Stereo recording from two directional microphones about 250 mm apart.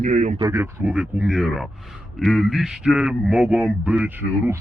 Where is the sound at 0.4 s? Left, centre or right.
Centre.